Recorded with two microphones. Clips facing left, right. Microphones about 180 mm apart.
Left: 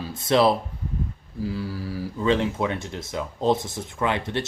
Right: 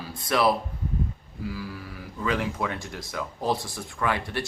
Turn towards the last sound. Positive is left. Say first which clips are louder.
# left 3 dB
turn(degrees=20)  # may be behind; listen again after turning